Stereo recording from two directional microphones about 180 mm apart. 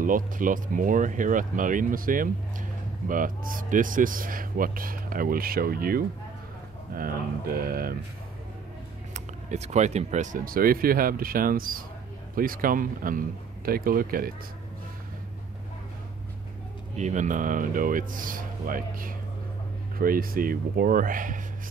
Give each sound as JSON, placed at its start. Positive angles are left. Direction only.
{"t": 0.0, "sound": "speech", "side_deg": -50}
{"t": 9.1, "sound": "speech", "side_deg": -40}
{"t": 16.9, "sound": "speech", "side_deg": -40}